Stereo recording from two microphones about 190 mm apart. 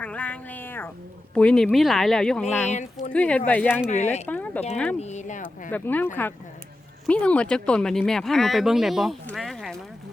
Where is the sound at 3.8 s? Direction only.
35° left (ahead or behind).